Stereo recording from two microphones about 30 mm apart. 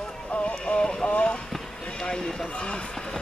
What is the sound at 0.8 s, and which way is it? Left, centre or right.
Boat, left.